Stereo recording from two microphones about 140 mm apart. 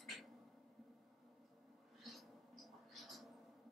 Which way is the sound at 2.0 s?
Centre (ahead or behind).